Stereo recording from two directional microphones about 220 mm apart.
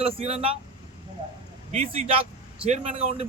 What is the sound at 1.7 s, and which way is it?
A man's voice, 30° right (ahead or behind).